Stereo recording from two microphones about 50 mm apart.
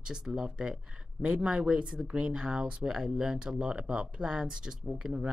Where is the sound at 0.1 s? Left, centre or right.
Centre.